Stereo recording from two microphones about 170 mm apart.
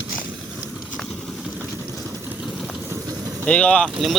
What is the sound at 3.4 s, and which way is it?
Speech, 5° left (ahead or behind).